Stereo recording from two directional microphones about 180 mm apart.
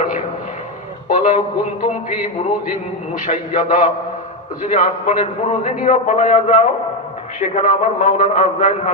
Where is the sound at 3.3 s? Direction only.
45° left (ahead or behind).